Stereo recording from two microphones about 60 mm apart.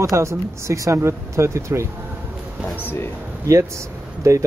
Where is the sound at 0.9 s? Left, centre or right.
Right.